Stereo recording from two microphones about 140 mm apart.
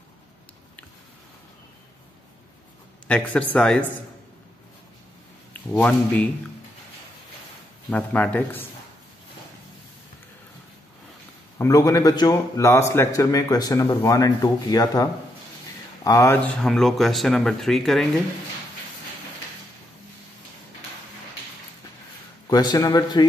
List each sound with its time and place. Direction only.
3.1 s speech: 10° left (ahead or behind)
5.5 s speech: 10° left (ahead or behind)
7.9 s speech: 10° left (ahead or behind)
11.5 s a man's voice: 20° left (ahead or behind)
16.4 s speech: centre (ahead or behind)
22.5 s a man's voice: 30° left (ahead or behind)